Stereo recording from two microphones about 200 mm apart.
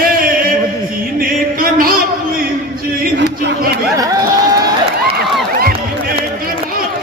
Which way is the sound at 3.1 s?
60° right (ahead or behind).